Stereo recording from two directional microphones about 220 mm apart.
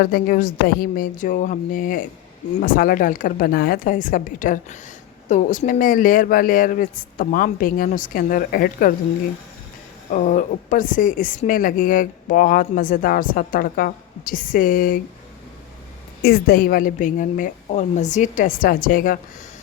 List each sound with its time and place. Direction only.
0.0 s a woman's voice: 40° left (ahead or behind)
10.1 s a woman's voice: 35° left (ahead or behind)
16.2 s a woman's voice: 45° left (ahead or behind)